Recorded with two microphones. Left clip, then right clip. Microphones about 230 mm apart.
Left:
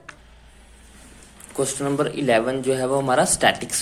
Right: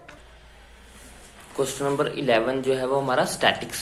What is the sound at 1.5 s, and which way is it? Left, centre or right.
A man's voice, left.